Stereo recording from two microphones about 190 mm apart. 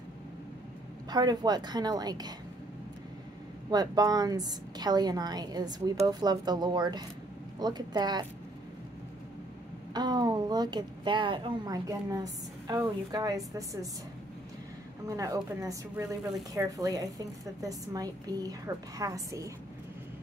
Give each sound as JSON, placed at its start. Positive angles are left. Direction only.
{"t": 1.1, "sound": "a woman's voice", "side_deg": -20}
{"t": 3.7, "sound": "a woman's voice", "side_deg": -20}
{"t": 9.9, "sound": "a woman's voice", "side_deg": -20}
{"t": 15.0, "sound": "a woman's voice", "side_deg": -15}